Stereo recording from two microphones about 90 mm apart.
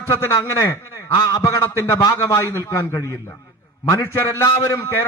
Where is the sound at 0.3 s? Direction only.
35° left (ahead or behind).